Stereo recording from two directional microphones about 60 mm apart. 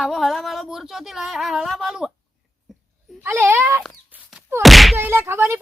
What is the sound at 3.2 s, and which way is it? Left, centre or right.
Speech, right.